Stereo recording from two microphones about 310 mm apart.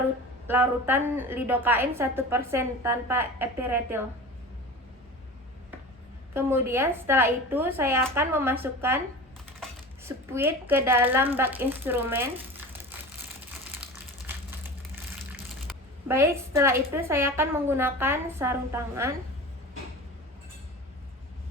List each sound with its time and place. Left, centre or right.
0.4 s a woman's voice: centre
6.3 s a woman's voice: centre
14.3 s crushing: centre
15.6 s a woman's voice: centre